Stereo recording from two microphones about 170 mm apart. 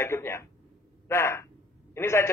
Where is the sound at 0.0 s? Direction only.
15° left (ahead or behind).